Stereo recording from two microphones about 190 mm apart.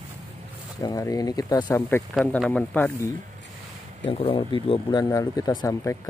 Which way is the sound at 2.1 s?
Centre (ahead or behind).